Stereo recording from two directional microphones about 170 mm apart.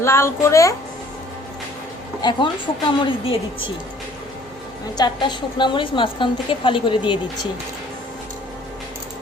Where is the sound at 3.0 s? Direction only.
30° left (ahead or behind).